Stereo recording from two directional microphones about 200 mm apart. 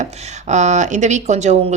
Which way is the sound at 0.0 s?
35° right (ahead or behind).